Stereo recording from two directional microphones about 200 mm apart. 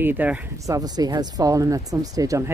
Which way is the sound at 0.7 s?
20° right (ahead or behind).